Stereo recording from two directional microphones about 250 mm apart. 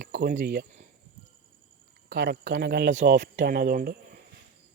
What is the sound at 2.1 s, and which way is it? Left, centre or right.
Speech, right.